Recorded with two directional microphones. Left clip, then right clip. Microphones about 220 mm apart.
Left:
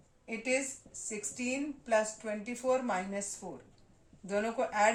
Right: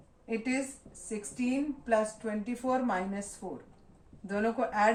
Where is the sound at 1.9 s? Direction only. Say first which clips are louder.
Right 1 dB; 40° left (ahead or behind).